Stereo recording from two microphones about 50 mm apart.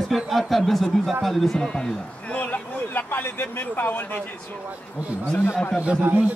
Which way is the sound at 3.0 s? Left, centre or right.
Left.